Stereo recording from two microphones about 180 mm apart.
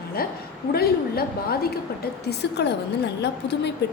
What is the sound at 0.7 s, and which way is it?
Speech, 60° left (ahead or behind).